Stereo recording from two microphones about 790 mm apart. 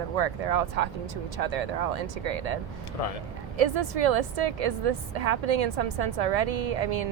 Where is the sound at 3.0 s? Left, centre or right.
Left.